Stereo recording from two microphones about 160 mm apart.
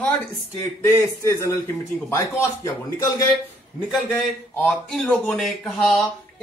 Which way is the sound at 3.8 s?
Centre (ahead or behind).